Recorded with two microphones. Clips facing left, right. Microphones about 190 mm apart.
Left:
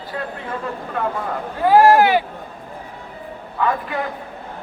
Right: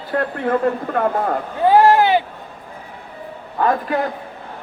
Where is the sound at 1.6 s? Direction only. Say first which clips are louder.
Even; 25° right (ahead or behind).